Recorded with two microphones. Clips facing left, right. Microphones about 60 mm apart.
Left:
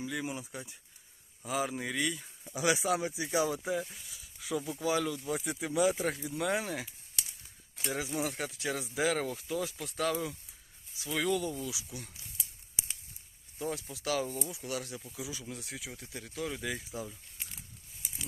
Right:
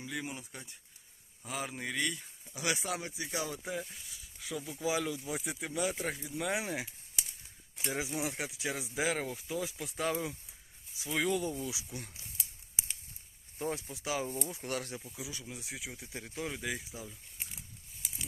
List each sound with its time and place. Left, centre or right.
0.0 s speech: centre
4.9 s speech: centre; by 12.2 s right
13.6 s speech: right
13.9 s speech: centre
14.4 s speech: right
15.2 s speech: centre
15.4 s speech: centre
16.0 s speech: right
16.5 s speech: centre